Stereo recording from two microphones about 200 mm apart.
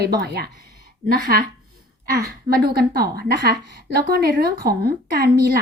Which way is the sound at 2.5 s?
50° right (ahead or behind).